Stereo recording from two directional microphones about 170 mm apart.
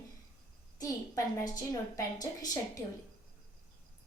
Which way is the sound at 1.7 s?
20° left (ahead or behind).